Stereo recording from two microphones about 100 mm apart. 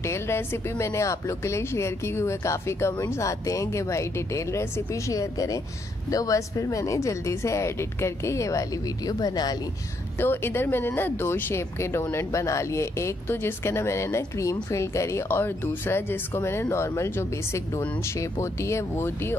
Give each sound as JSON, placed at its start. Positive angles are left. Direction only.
{"t": 0.0, "sound": "speech", "side_deg": 25}
{"t": 10.1, "sound": "speech", "side_deg": 20}